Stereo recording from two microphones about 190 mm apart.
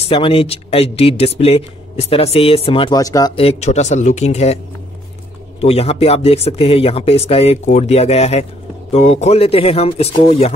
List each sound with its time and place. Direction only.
0.0 s speech: 30° left (ahead or behind)
3.3 s speech: 35° left (ahead or behind)
5.6 s speech: 30° left (ahead or behind)